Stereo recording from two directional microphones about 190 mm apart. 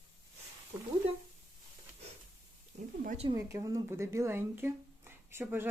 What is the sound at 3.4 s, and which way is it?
Speech, 15° right (ahead or behind).